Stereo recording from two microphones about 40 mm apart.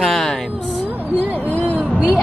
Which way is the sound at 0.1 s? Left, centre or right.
Centre.